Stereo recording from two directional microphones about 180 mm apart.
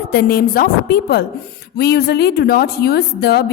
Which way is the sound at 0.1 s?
60° left (ahead or behind).